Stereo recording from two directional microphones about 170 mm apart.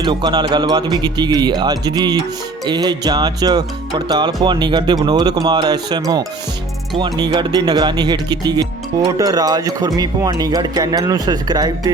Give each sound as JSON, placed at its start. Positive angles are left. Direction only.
{"t": 0.0, "sound": "speech", "side_deg": -25}